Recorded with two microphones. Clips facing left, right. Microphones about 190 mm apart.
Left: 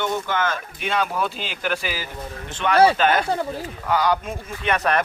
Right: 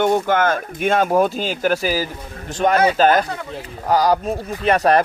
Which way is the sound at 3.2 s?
30° left (ahead or behind).